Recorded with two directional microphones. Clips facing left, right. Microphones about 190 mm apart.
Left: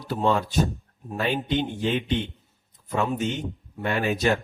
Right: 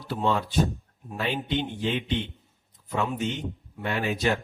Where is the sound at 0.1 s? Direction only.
50° left (ahead or behind).